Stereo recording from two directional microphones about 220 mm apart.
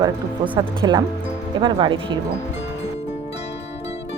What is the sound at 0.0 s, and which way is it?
Speech, 20° right (ahead or behind).